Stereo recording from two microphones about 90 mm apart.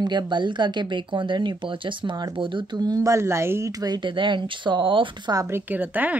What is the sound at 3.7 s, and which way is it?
Speech, 45° right (ahead or behind).